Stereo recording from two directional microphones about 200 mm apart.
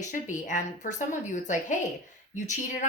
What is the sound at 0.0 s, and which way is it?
A woman's voice, 40° left (ahead or behind).